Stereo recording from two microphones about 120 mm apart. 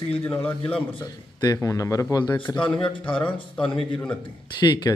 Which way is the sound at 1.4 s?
30° left (ahead or behind).